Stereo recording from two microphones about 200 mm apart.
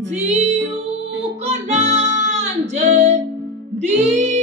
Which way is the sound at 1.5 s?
35° right (ahead or behind).